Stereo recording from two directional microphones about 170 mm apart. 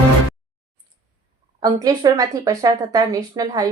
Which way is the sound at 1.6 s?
20° right (ahead or behind).